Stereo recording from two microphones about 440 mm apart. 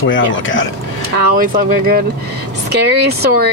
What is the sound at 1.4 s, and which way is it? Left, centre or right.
Speech, centre.